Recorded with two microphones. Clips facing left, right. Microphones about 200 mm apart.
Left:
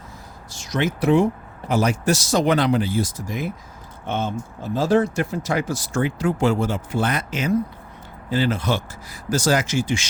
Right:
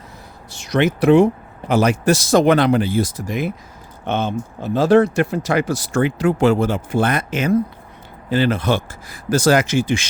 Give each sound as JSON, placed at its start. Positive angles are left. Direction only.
{"t": 0.5, "sound": "speech", "side_deg": -65}